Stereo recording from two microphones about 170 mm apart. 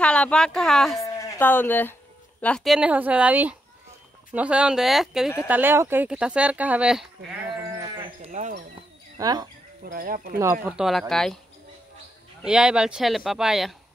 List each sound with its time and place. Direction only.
0.0 s speech: 5° left (ahead or behind)
1.0 s speech: 15° left (ahead or behind); by 7.1 s 5° right (ahead or behind)
7.8 s livestock: 30° right (ahead or behind)
8.3 s basketball bounce: 45° right (ahead or behind)
9.2 s speech: 25° right (ahead or behind)
9.8 s speech: 55° right (ahead or behind)
10.4 s speech: 15° right (ahead or behind)
10.8 s speech: centre (ahead or behind)
12.4 s speech: 5° right (ahead or behind)